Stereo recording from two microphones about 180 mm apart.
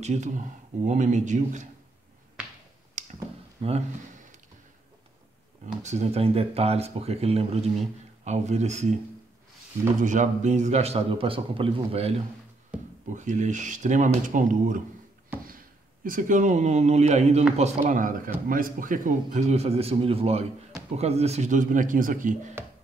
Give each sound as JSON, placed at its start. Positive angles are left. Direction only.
{"t": 0.0, "sound": "speech", "side_deg": -40}
{"t": 3.0, "sound": "a sound", "side_deg": -40}
{"t": 3.6, "sound": "speech", "side_deg": -40}
{"t": 5.8, "sound": "speech", "side_deg": -40}
{"t": 9.9, "sound": "speech", "side_deg": -45}
{"t": 12.7, "sound": "a sound", "side_deg": -5}
{"t": 13.1, "sound": "speech", "side_deg": -45}